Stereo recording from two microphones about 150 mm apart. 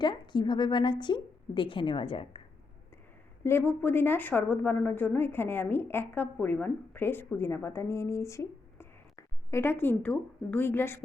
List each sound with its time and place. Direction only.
0.0 s a woman's voice: 30° left (ahead or behind)
3.4 s a woman's voice: 15° left (ahead or behind)